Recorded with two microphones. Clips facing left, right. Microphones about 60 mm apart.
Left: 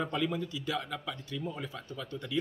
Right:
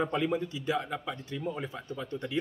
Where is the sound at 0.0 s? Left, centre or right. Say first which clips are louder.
Right 3 dB; right.